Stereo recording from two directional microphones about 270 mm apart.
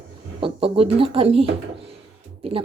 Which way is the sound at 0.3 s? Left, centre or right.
Centre.